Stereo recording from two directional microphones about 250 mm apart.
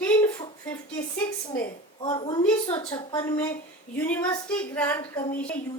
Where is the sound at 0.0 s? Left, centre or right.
Centre.